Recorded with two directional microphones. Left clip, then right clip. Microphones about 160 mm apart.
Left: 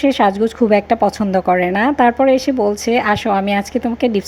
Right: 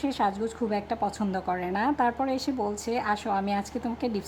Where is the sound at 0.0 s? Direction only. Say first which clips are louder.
Left 14 dB; 30° left (ahead or behind).